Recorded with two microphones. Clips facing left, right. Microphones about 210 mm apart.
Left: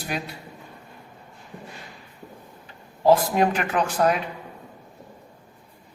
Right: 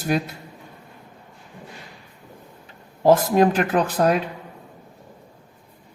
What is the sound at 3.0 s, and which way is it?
Speech, 45° right (ahead or behind).